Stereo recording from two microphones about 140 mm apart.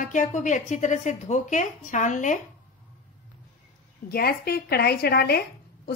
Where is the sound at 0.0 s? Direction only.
65° left (ahead or behind).